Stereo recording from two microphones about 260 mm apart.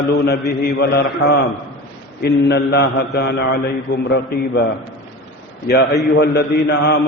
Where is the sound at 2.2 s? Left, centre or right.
Left.